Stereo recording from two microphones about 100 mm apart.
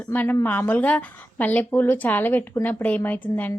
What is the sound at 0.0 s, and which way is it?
A woman's voice, 15° left (ahead or behind).